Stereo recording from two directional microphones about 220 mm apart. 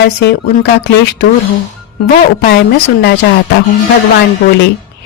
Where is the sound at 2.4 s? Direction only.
45° left (ahead or behind).